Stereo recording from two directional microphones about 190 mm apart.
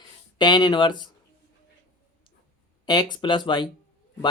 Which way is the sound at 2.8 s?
20° left (ahead or behind).